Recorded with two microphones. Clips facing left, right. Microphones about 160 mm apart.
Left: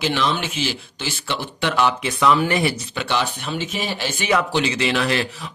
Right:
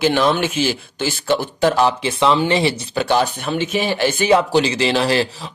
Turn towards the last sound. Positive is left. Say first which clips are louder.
# right 4 dB
turn(degrees=-30)  # may be behind; listen again after turning